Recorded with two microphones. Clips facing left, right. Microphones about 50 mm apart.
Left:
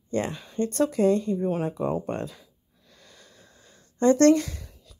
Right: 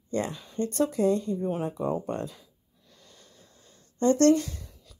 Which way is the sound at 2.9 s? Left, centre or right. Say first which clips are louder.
Left 3 dB; left.